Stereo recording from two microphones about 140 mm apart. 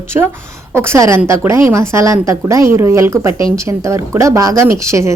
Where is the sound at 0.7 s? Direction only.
20° right (ahead or behind).